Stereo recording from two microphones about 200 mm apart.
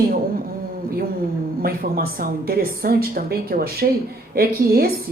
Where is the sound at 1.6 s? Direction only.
50° right (ahead or behind).